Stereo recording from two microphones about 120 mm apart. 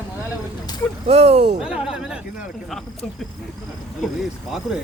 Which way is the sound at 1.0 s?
60° right (ahead or behind).